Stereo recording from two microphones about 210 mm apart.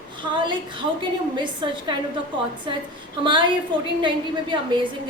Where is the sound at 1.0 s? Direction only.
25° right (ahead or behind).